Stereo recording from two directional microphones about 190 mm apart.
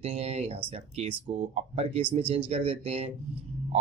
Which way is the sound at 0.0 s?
35° right (ahead or behind).